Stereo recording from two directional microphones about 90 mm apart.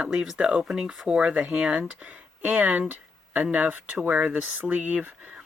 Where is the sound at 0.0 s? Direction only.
10° right (ahead or behind).